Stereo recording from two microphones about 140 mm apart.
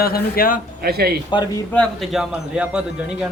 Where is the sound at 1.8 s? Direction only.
Centre (ahead or behind).